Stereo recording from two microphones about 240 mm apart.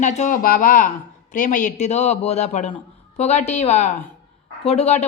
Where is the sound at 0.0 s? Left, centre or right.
Left.